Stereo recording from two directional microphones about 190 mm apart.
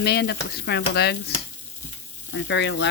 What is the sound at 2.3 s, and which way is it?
Speech, 70° left (ahead or behind).